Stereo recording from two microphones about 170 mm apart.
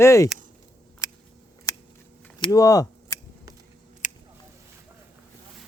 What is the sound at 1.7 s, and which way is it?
Scissors, 20° left (ahead or behind).